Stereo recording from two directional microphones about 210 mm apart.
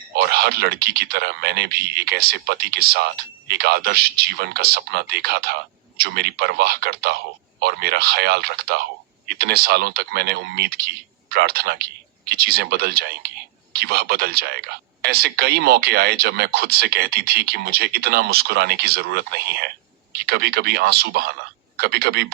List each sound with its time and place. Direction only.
0.3 s speech: 50° right (ahead or behind)